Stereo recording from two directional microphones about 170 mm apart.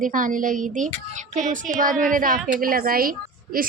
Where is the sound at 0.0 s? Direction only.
50° right (ahead or behind).